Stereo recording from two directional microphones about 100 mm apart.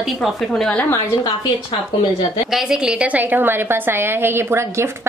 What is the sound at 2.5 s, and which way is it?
A woman's voice, 5° right (ahead or behind).